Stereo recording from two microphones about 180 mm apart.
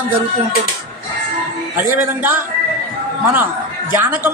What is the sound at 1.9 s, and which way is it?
Speech, 10° right (ahead or behind).